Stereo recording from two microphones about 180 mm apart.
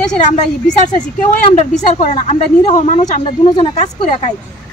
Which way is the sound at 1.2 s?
40° left (ahead or behind).